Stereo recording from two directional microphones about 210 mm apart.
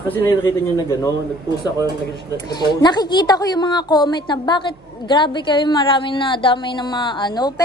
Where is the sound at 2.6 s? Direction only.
20° left (ahead or behind).